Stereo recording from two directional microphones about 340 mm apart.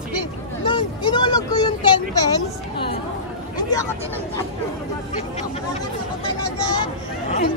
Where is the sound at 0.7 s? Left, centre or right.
Centre.